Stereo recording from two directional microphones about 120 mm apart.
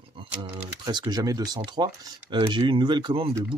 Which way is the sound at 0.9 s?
35° right (ahead or behind).